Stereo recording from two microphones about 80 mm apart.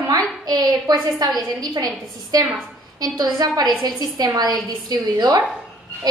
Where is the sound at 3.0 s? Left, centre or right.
Right.